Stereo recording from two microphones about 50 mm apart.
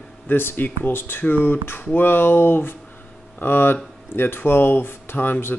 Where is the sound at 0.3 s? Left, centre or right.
Left.